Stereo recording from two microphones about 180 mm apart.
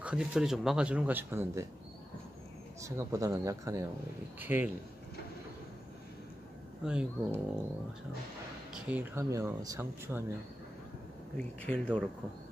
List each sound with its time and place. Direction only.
0.0 s speech: 5° right (ahead or behind)
2.8 s speech: 15° right (ahead or behind)
6.8 s speech: 5° right (ahead or behind)
8.7 s speech: 5° right (ahead or behind)
11.3 s speech: 5° left (ahead or behind)